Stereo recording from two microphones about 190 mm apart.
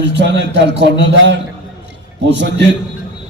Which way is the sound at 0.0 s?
65° right (ahead or behind).